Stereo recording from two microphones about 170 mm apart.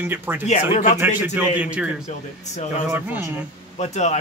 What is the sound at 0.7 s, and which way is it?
Speech, 45° left (ahead or behind).